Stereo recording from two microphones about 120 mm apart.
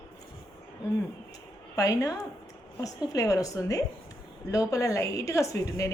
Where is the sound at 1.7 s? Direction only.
30° left (ahead or behind).